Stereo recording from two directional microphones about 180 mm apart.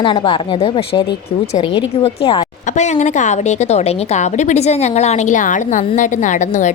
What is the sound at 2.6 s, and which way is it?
A woman's voice, 40° left (ahead or behind).